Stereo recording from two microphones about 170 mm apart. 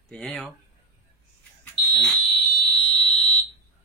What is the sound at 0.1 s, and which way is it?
Speech, centre (ahead or behind).